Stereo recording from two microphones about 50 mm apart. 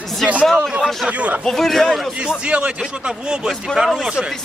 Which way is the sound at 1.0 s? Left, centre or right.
Right.